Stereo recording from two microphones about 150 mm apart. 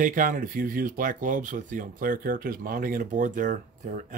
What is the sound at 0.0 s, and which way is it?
Speech, 60° right (ahead or behind).